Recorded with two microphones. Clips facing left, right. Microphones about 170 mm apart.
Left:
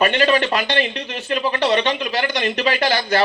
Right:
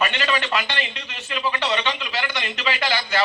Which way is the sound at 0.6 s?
50° left (ahead or behind).